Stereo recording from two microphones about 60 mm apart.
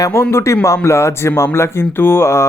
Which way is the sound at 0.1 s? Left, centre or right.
Left.